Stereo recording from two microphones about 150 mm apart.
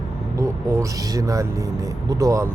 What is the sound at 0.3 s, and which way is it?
Speech, 20° right (ahead or behind).